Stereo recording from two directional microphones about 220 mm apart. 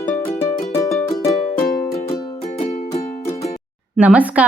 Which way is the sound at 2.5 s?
30° left (ahead or behind).